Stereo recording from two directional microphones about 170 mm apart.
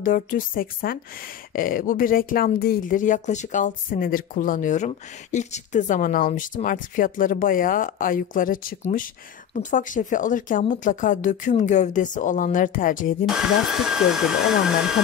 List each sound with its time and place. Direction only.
0.0 s a woman's voice: 55° left (ahead or behind)
13.2 s speech: 5° right (ahead or behind)